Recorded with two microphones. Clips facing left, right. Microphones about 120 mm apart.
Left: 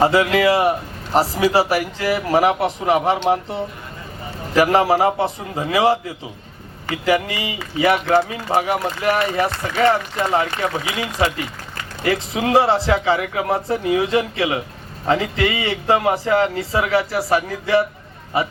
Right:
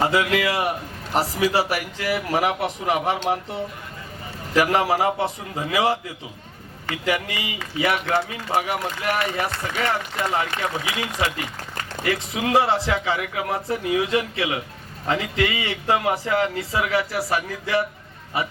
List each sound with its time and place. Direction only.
0.0 s a man's voice: 30° left (ahead or behind)
12.0 s a man's voice: 30° left (ahead or behind)